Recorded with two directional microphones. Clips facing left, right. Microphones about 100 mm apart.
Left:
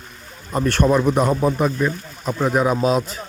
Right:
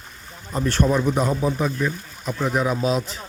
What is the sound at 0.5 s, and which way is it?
Speech, 60° left (ahead or behind).